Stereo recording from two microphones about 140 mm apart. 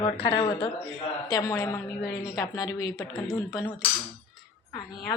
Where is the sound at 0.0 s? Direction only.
40° left (ahead or behind).